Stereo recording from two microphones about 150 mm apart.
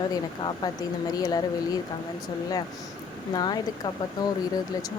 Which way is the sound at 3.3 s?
25° left (ahead or behind).